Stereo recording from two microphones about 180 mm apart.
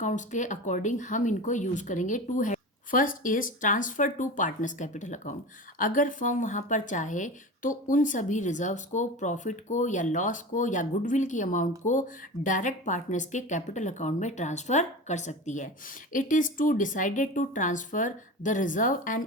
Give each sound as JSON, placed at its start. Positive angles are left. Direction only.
{"t": 0.0, "sound": "a woman's voice", "side_deg": 45}